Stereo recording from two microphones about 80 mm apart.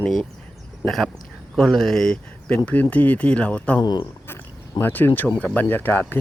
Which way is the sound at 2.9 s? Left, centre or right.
Centre.